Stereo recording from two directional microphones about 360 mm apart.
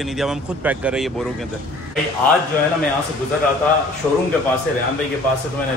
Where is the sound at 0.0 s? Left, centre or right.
Centre.